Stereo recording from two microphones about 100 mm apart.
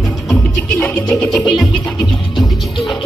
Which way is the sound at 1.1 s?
5° left (ahead or behind).